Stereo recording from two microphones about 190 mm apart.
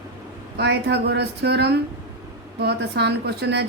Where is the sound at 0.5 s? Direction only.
60° right (ahead or behind).